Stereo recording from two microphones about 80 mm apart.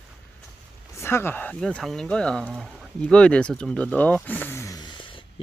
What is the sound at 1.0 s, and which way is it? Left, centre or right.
Speech, left.